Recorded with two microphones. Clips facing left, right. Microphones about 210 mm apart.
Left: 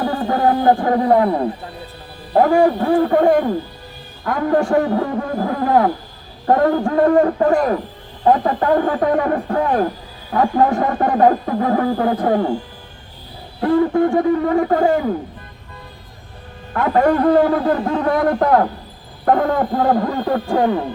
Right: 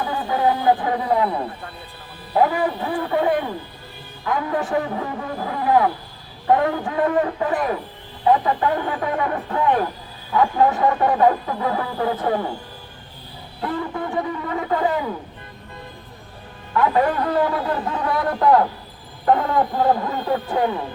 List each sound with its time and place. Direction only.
0.0 s a sound: 45° left (ahead or behind)
2.3 s speech: 45° left (ahead or behind)
13.6 s speech: 50° left (ahead or behind)
16.7 s speech: 45° left (ahead or behind)